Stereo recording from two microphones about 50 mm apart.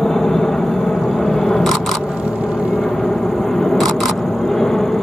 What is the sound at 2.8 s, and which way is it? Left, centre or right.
Single-lens reflex camera, centre.